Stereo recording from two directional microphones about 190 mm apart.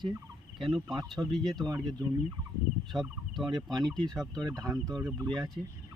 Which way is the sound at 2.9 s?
Centre (ahead or behind).